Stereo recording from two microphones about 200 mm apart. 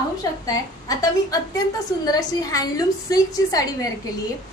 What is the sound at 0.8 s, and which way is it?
A woman's voice, 15° left (ahead or behind).